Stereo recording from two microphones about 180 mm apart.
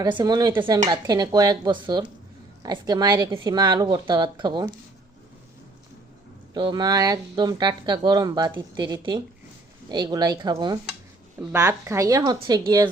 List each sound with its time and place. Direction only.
0.0 s speech: 25° right (ahead or behind)
6.5 s speech: 25° right (ahead or behind)